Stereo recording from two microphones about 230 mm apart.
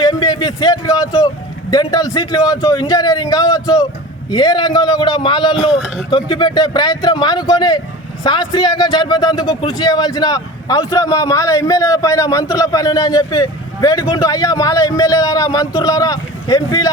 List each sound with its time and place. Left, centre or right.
0.0 s a man's voice: centre
5.8 s speech: centre
6.1 s a man's voice: centre